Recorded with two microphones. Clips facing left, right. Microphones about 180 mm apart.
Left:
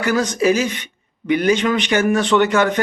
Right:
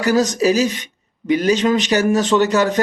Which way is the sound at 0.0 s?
40° right (ahead or behind).